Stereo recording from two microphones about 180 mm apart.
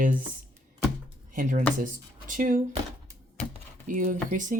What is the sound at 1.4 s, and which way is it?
Speech, 45° right (ahead or behind).